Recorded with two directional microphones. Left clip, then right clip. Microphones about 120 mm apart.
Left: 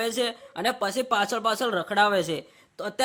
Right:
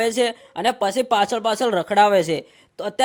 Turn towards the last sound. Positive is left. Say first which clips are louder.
# right 6 dB
turn(degrees=-30)  # may be behind; listen again after turning